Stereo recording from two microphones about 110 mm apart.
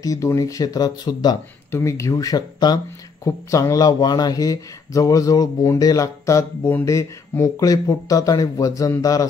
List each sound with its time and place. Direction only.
0.0 s speech: 30° left (ahead or behind)
1.7 s speech: 25° left (ahead or behind)